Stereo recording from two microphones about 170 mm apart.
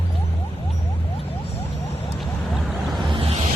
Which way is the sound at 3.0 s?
30° right (ahead or behind).